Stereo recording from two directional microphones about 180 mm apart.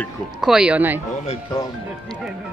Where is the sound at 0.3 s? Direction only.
5° right (ahead or behind).